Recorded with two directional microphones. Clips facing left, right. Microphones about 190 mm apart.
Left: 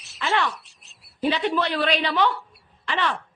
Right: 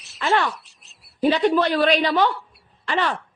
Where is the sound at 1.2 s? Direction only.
45° right (ahead or behind).